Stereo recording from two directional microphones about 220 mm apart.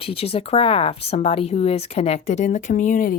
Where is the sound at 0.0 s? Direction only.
25° left (ahead or behind).